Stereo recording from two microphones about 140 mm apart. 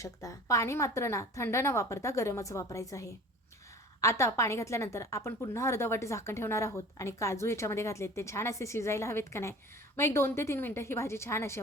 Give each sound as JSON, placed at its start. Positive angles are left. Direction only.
{"t": 0.0, "sound": "a woman's voice", "side_deg": 25}